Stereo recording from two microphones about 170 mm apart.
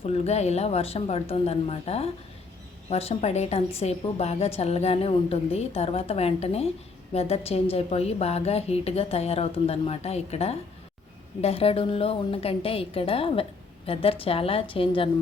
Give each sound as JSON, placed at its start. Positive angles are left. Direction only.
{"t": 0.0, "sound": "a woman's voice", "side_deg": 40}